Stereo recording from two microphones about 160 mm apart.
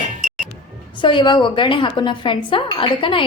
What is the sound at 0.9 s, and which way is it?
Speech, 30° left (ahead or behind).